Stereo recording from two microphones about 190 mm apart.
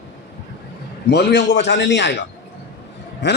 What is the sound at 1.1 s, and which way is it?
A man's voice, 60° left (ahead or behind).